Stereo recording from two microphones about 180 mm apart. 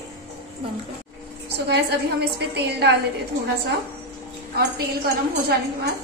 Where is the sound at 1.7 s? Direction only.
65° right (ahead or behind).